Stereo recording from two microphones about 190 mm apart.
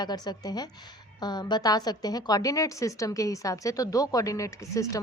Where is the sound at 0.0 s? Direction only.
20° left (ahead or behind).